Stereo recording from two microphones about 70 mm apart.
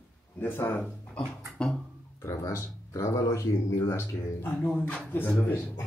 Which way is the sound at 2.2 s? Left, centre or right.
Left.